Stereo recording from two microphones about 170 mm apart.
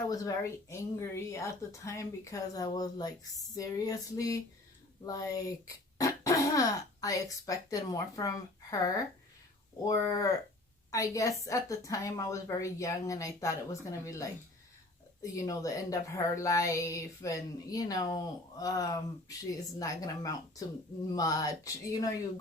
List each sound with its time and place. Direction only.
0.1 s a woman's voice: 20° left (ahead or behind)